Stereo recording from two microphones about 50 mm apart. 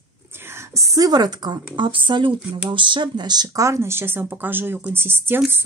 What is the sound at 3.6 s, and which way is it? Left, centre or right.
Speech, right.